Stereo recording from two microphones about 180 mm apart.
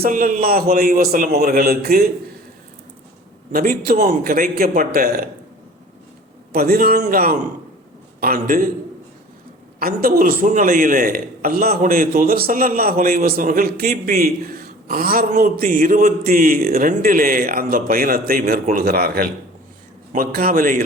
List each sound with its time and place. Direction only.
0.0 s a man's voice: 50° right (ahead or behind)
3.5 s a man's voice: 50° right (ahead or behind)
6.5 s a man's voice: 55° right (ahead or behind)
9.8 s a man's voice: 55° right (ahead or behind)